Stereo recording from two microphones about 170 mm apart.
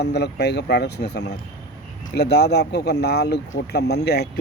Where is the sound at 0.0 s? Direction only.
80° left.